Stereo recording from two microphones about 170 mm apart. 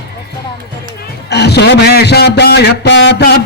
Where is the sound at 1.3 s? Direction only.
75° left (ahead or behind).